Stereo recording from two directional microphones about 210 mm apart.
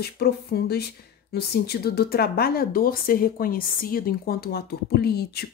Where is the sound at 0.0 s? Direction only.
50° left (ahead or behind).